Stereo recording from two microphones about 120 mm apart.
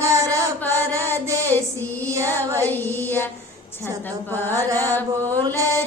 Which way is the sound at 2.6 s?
20° left (ahead or behind).